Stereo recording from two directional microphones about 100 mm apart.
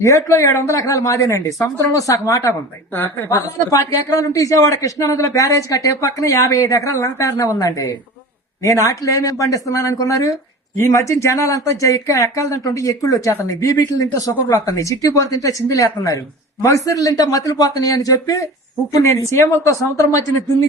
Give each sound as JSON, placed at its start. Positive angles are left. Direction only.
{"t": 0.0, "sound": "speech", "side_deg": 30}